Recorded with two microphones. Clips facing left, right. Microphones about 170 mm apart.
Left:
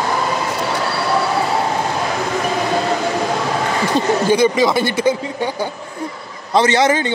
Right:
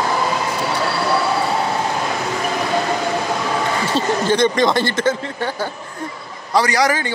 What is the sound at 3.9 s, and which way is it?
Speech, 10° left (ahead or behind).